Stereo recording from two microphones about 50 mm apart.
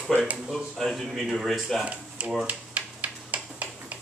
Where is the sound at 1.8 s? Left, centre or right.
Right.